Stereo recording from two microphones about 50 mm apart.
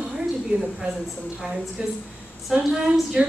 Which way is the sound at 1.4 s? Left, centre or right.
Centre.